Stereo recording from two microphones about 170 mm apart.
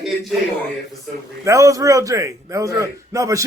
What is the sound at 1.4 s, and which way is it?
A man's voice, 20° right (ahead or behind).